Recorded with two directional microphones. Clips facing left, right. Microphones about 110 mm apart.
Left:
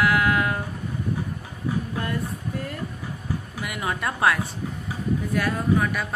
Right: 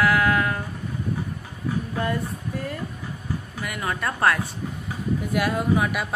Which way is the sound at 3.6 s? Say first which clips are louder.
Right 1 dB; 20° left (ahead or behind).